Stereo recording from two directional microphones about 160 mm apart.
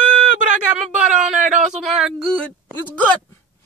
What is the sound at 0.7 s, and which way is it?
Speech, 5° right (ahead or behind).